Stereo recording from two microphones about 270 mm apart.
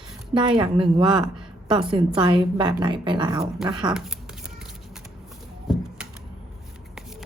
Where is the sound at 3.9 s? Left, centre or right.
Centre.